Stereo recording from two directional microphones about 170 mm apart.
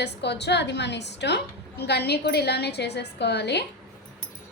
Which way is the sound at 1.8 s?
75° left (ahead or behind).